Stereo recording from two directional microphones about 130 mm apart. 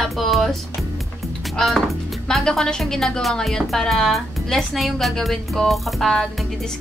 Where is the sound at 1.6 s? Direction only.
Centre (ahead or behind).